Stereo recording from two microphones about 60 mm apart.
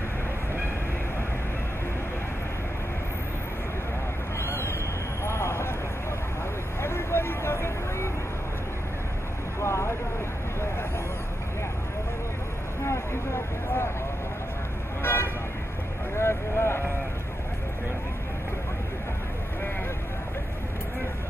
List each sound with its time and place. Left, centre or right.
5.2 s vehicle: left
6.8 s vehicle: left
9.6 s vehicle: left
12.8 s vehicle: left
15.0 s vehicle: left